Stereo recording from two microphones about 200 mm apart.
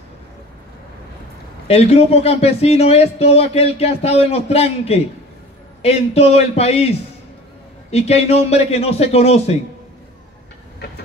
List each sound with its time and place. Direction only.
1.7 s speech: 30° left (ahead or behind)